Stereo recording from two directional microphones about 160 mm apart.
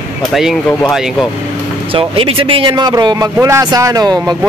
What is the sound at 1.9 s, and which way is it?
Speech, 35° right (ahead or behind).